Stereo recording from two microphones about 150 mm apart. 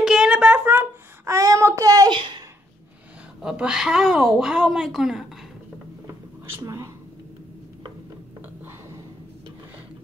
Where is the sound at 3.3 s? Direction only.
5° right (ahead or behind).